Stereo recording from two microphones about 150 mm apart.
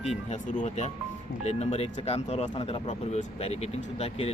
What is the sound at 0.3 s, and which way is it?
Speech, 50° left (ahead or behind).